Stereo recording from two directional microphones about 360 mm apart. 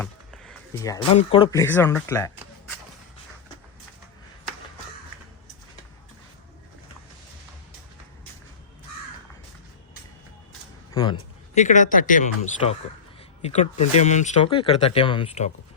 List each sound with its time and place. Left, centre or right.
0.0 s speech: centre
10.9 s speech: centre